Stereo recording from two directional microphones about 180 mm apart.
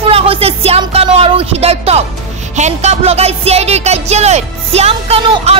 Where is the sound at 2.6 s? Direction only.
40° right (ahead or behind).